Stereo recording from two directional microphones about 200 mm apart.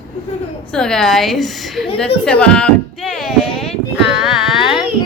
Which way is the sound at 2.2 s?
5° left (ahead or behind).